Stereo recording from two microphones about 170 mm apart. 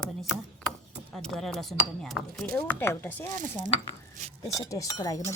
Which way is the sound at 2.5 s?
15° left (ahead or behind).